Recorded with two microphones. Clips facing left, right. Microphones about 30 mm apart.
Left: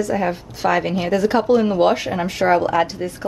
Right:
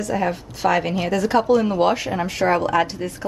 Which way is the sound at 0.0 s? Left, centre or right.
Centre.